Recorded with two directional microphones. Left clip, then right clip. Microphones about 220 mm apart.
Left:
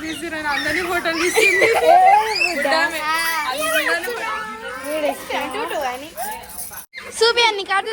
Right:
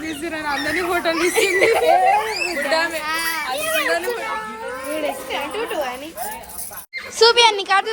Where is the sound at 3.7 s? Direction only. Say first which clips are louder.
Right 2 dB; 20° right (ahead or behind).